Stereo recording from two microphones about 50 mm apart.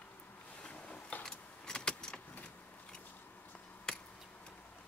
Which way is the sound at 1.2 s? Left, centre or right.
Centre.